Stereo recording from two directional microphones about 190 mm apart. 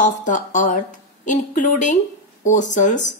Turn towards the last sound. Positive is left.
turn(degrees=40)  # may be behind; listen again after turning